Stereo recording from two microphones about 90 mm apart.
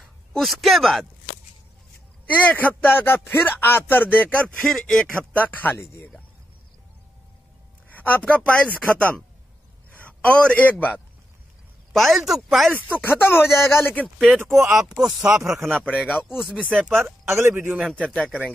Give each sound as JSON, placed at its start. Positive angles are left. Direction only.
{"t": 0.3, "sound": "speech", "side_deg": 0}
{"t": 2.2, "sound": "speech", "side_deg": 20}
{"t": 5.3, "sound": "speech", "side_deg": 15}
{"t": 7.9, "sound": "a man's voice", "side_deg": 20}
{"t": 11.9, "sound": "speech", "side_deg": 0}
{"t": 12.7, "sound": "speech", "side_deg": 20}
{"t": 14.1, "sound": "speech", "side_deg": 5}
{"t": 14.4, "sound": "speech", "side_deg": -25}
{"t": 14.7, "sound": "speech", "side_deg": -5}
{"t": 16.6, "sound": "speech", "side_deg": -20}
{"t": 17.3, "sound": "a man's voice", "side_deg": -30}
{"t": 17.8, "sound": "speech", "side_deg": 10}